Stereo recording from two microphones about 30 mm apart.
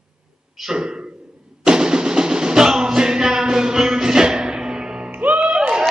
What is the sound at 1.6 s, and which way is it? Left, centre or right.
Music, right.